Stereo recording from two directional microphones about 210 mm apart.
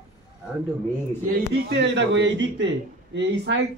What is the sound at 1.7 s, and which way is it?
Speech, 60° right (ahead or behind).